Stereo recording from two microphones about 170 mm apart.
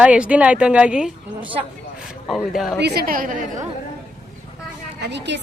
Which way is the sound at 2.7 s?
75° right (ahead or behind).